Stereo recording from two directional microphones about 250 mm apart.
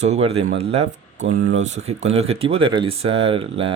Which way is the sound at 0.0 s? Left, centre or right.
Right.